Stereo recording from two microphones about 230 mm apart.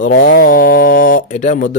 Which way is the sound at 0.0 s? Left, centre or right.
Left.